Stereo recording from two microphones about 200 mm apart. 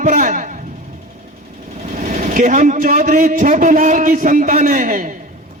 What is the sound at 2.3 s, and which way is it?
A man's voice, 40° right (ahead or behind).